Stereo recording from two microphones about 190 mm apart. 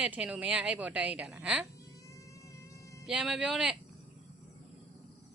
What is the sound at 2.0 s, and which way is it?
Cat, 15° left (ahead or behind).